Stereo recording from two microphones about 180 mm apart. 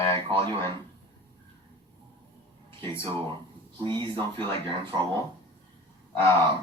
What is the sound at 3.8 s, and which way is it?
Speech, 25° right (ahead or behind).